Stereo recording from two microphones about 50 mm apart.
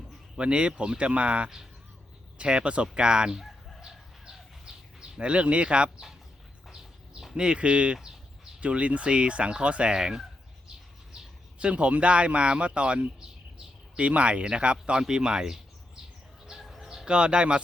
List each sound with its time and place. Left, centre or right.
0.3 s speech: right
3.8 s bird: centre
7.3 s speech: centre
11.6 s speech: right
16.5 s chicken: centre
17.1 s speech: centre